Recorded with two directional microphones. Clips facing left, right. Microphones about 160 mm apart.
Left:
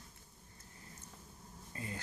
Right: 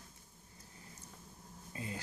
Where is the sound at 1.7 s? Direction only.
20° right (ahead or behind).